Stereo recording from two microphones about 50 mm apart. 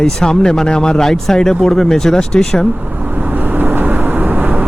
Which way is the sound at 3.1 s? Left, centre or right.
Right.